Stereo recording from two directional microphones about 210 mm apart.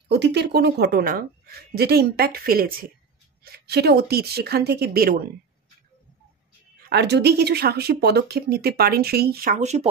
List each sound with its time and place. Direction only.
0.1 s speech: 55° right (ahead or behind)
6.9 s speech: 50° right (ahead or behind); by 9.8 s 35° right (ahead or behind)